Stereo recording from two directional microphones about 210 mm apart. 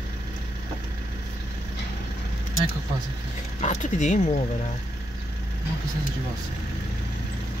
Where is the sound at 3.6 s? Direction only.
35° left (ahead or behind).